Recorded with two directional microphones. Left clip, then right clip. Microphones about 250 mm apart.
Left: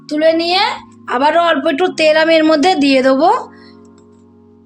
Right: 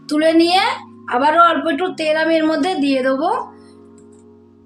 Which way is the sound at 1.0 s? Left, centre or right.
Left.